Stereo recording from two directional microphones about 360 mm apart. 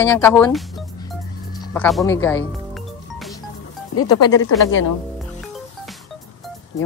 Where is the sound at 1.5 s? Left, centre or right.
Centre.